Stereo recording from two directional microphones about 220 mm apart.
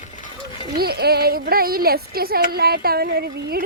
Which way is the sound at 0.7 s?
45° right (ahead or behind).